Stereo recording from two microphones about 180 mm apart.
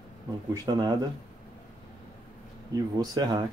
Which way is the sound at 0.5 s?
20° right (ahead or behind).